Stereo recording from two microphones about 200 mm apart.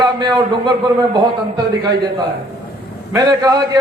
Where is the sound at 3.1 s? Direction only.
15° right (ahead or behind).